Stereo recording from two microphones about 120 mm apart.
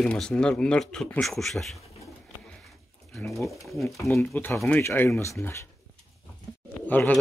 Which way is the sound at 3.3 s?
Centre (ahead or behind).